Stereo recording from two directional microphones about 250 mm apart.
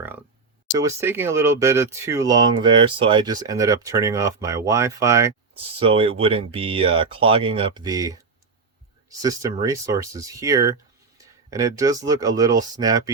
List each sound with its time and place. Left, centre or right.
0.7 s speech: centre
9.2 s speech: centre